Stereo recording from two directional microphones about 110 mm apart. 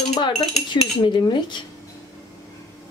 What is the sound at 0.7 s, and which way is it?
Speech, 45° left (ahead or behind).